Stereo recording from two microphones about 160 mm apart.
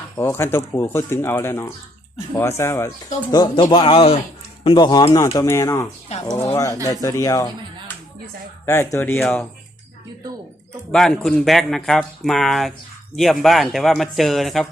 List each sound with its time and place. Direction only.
0.2 s a man's voice: 15° left (ahead or behind)
6.1 s a man's voice: 40° left (ahead or behind)
6.8 s speech: 20° left (ahead or behind)
8.6 s speech: 15° left (ahead or behind)
10.9 s speech: 5° left (ahead or behind)